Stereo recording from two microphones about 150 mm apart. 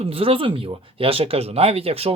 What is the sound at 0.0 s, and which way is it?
Speech, 40° right (ahead or behind).